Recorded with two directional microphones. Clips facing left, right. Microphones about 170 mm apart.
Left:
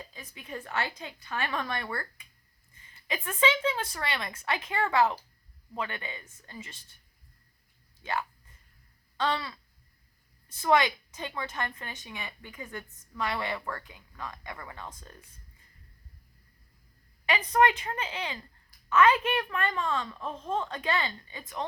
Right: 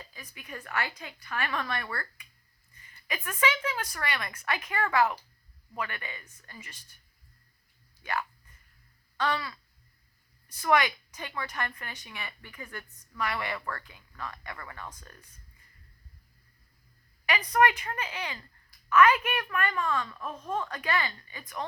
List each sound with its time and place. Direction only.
0.0 s a woman's voice: 25° left (ahead or behind)
8.0 s a woman's voice: 20° left (ahead or behind)
9.1 s a sound: 25° left (ahead or behind)
10.5 s a woman's voice: 25° left (ahead or behind)
17.2 s a woman's voice: 25° left (ahead or behind)